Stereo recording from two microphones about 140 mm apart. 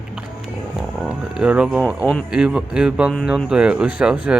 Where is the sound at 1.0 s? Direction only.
5° right (ahead or behind).